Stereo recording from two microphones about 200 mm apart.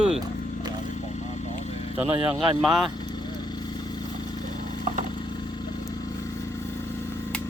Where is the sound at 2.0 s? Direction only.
25° right (ahead or behind).